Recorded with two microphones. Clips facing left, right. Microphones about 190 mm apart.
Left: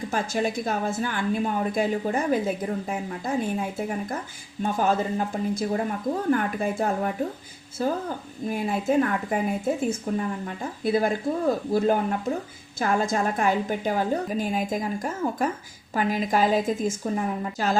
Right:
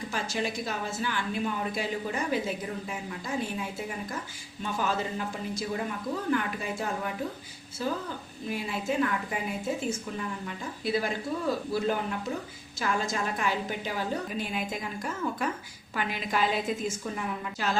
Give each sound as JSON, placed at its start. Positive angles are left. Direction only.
{"t": 0.1, "sound": "a woman's voice", "side_deg": 50}